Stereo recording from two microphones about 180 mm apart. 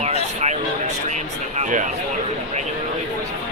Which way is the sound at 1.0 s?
40° right (ahead or behind).